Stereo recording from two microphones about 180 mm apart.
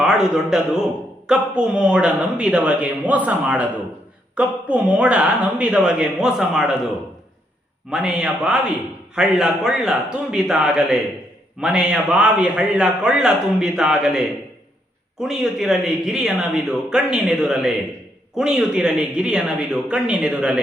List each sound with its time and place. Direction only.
0.0 s speech: 5° right (ahead or behind)
7.9 s speech: 5° right (ahead or behind)
15.2 s speech: centre (ahead or behind)